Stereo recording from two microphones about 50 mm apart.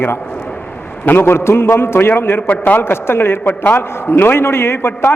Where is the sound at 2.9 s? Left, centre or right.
Left.